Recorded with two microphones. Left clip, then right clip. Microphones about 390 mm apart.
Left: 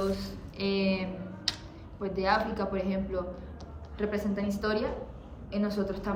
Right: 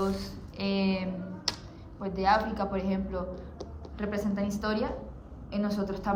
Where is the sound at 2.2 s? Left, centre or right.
Centre.